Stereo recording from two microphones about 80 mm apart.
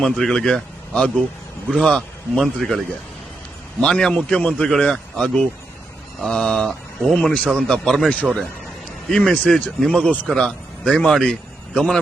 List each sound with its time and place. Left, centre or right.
0.0 s a man's voice: centre